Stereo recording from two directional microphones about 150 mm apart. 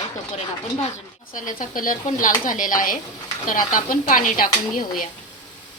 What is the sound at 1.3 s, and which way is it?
Speech, 65° left (ahead or behind).